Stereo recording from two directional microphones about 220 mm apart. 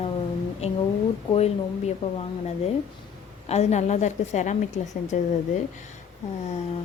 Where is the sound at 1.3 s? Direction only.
30° left (ahead or behind).